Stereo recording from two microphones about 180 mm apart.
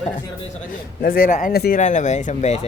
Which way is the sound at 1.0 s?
55° left (ahead or behind).